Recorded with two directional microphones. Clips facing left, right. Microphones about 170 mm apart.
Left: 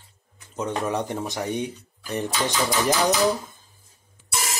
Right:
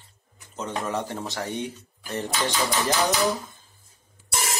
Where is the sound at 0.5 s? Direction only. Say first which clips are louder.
Left 3 dB; 15° left (ahead or behind).